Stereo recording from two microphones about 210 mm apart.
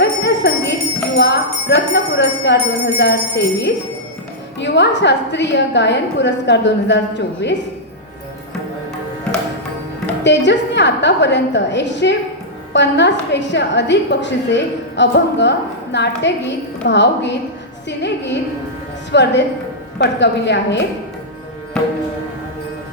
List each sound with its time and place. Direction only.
0.0 s jingle bell: 55° left (ahead or behind)
4.6 s a woman's voice: 55° left (ahead or behind)
10.2 s a woman's voice: 55° left (ahead or behind)